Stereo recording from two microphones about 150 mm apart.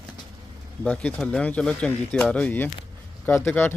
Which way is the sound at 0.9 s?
10° left (ahead or behind).